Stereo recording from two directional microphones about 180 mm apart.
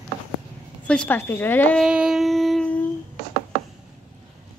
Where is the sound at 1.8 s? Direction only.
5° right (ahead or behind).